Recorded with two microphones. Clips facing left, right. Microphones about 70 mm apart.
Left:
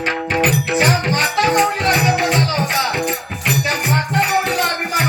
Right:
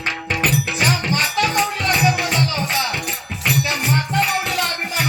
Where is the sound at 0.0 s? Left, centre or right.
Left.